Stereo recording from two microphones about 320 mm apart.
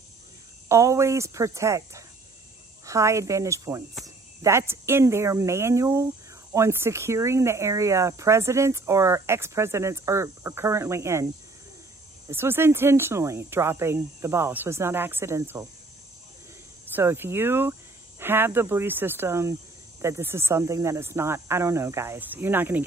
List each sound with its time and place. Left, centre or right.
0.7 s speech: centre
12.3 s speech: centre
16.9 s speech: centre